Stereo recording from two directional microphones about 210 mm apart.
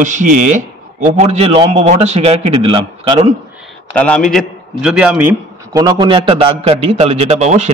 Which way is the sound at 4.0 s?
5° left (ahead or behind).